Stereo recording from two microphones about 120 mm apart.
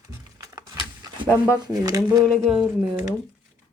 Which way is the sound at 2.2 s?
5° left (ahead or behind).